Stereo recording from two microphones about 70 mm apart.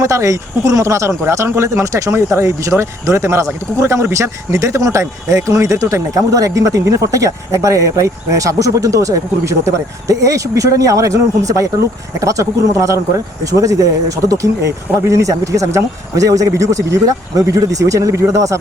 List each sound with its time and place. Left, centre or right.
0.0 s speech: right